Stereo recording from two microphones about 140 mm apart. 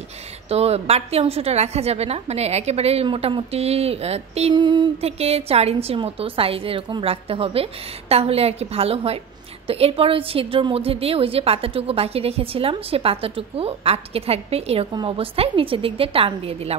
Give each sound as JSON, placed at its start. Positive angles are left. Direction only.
{"t": 0.5, "sound": "a woman's voice", "side_deg": -45}
{"t": 4.6, "sound": "a woman's voice", "side_deg": -30}
{"t": 5.0, "sound": "a woman's voice", "side_deg": -45}
{"t": 14.9, "sound": "a woman's voice", "side_deg": -35}